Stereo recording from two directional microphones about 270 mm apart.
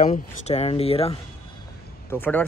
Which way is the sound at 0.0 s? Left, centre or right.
Left.